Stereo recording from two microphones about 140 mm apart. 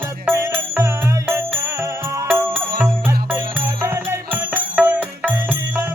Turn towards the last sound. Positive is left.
turn(degrees=-15)  # may be behind; listen again after turning